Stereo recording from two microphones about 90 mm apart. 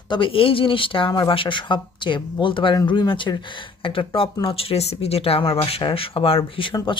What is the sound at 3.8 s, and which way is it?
Speech, 80° left.